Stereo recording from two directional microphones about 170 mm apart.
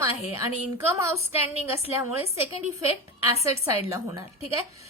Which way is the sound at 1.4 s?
35° left (ahead or behind).